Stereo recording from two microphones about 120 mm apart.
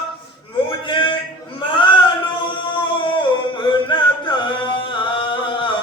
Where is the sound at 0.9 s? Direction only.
40° left (ahead or behind).